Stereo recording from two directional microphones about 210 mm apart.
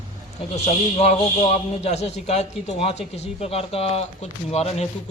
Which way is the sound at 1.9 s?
30° left (ahead or behind).